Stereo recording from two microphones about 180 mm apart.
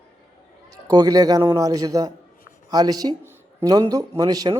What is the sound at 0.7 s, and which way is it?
A man's voice, 20° right (ahead or behind).